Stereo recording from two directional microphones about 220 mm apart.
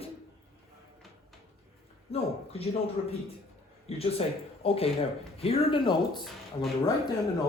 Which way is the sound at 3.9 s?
25° left (ahead or behind).